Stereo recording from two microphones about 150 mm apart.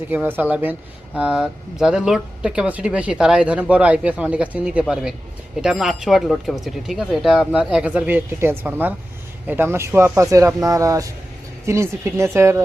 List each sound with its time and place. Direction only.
0.1 s speech: 10° right (ahead or behind)